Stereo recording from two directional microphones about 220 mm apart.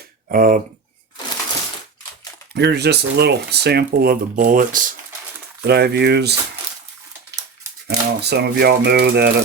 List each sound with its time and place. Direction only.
0.3 s speech: 40° right (ahead or behind)
2.6 s speech: 50° right (ahead or behind)
7.9 s speech: 50° right (ahead or behind)